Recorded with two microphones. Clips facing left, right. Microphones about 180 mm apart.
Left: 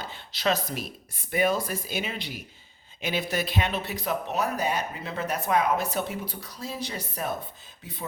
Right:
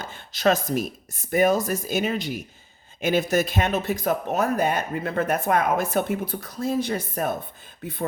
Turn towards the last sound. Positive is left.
turn(degrees=-50)  # may be behind; listen again after turning